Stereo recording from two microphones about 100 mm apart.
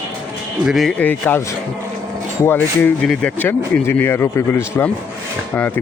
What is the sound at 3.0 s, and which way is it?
Speech, 10° left (ahead or behind).